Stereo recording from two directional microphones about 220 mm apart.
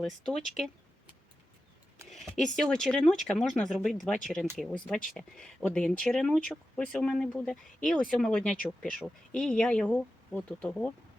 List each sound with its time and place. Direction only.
0.0 s speech: centre (ahead or behind)
2.0 s speech: centre (ahead or behind)